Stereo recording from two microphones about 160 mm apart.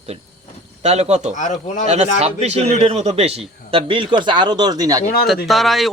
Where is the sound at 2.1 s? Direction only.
40° right (ahead or behind); by 5.0 s 25° right (ahead or behind).